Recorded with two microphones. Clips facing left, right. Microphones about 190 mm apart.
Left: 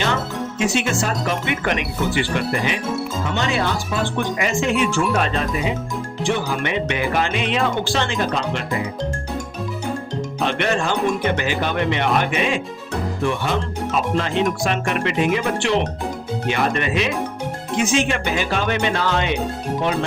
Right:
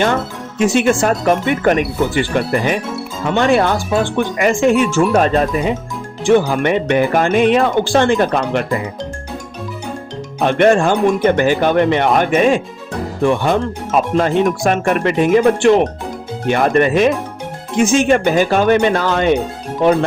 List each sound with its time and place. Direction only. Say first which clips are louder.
0.6 s speech: right 8 dB; 50° right (ahead or behind)
10.4 s speech: right 10 dB; 50° right (ahead or behind)